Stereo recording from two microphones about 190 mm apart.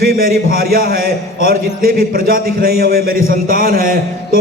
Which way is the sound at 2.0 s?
50° right (ahead or behind).